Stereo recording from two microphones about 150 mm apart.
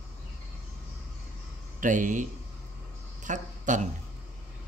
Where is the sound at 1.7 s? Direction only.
60° right (ahead or behind).